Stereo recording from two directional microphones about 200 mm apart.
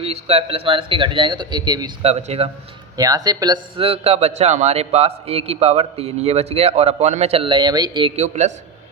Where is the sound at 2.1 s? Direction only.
30° right (ahead or behind).